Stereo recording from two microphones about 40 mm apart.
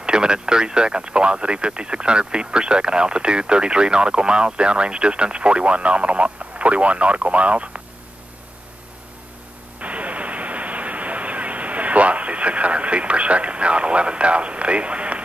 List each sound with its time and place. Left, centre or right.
0.0 s speech: right
9.8 s radio: right